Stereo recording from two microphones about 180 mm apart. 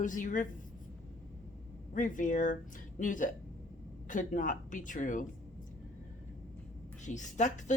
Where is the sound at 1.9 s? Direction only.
45° left (ahead or behind).